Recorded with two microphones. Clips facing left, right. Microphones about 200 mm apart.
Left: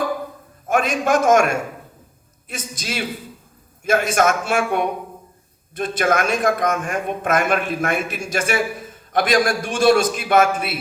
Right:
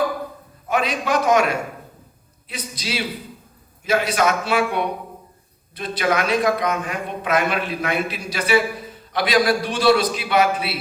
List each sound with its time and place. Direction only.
0.7 s a man's voice: 50° left (ahead or behind)